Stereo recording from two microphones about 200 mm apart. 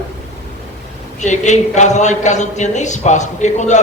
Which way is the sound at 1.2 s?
35° left (ahead or behind).